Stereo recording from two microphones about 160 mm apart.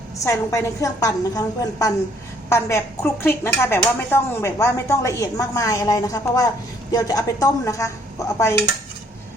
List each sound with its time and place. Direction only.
0.3 s a woman's voice: 20° left (ahead or behind)